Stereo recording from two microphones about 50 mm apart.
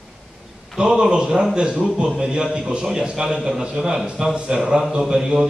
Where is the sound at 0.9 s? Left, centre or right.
Centre.